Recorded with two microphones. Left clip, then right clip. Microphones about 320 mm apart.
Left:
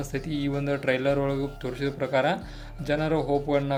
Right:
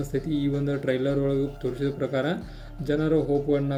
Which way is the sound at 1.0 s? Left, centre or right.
Left.